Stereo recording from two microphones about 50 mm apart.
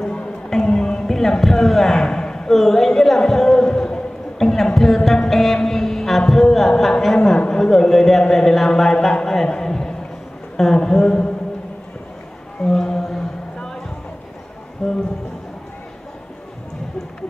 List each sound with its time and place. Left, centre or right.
0.0 s music: centre
3.6 s a sound: centre
5.3 s speech: centre
7.3 s a man's voice: centre
12.7 s a sound: centre
14.8 s speech: centre